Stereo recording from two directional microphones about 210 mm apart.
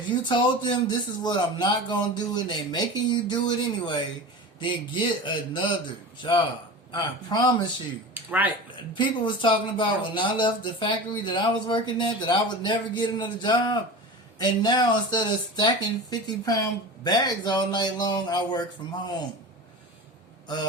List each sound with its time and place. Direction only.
0.1 s a man's voice: 25° left (ahead or behind)
8.1 s speech: 5° right (ahead or behind)
9.0 s a man's voice: 25° left (ahead or behind)